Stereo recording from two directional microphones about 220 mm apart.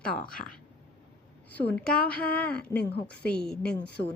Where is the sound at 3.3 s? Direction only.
5° left (ahead or behind).